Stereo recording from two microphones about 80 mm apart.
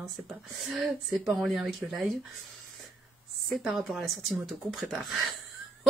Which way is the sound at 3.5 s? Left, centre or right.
Centre.